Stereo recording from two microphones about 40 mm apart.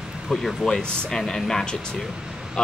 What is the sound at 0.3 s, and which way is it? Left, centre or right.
A man's voice, centre.